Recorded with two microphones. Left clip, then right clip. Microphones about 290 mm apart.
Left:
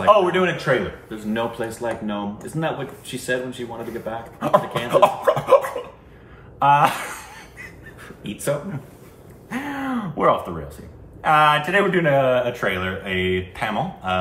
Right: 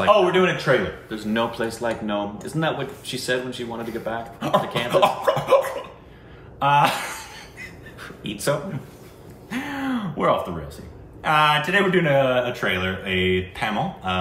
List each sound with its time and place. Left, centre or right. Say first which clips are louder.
0.0 s speech: left 1 dB; centre
6.6 s a sound: left 2 dB; centre
11.2 s speech: left 2 dB; centre